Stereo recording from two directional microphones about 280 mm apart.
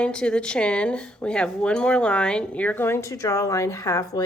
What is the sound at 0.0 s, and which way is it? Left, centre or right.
Speech, centre.